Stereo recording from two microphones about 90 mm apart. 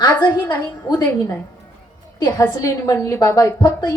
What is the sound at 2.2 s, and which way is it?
A woman's voice, 50° left (ahead or behind).